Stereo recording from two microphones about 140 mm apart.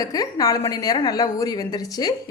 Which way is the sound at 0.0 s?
25° left (ahead or behind).